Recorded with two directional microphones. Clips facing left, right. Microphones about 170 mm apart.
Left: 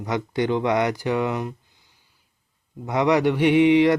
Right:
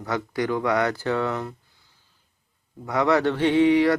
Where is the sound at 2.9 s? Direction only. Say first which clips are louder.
Left 2 dB; 20° left (ahead or behind).